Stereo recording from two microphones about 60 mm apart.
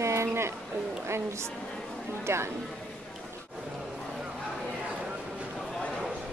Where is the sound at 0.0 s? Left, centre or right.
Right.